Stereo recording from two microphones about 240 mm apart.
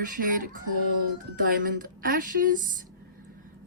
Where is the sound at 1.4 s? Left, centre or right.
Right.